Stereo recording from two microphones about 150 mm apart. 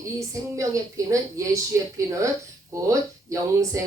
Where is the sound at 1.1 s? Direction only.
20° right (ahead or behind).